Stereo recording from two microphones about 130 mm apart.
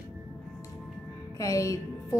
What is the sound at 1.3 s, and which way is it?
Speech, 25° left (ahead or behind).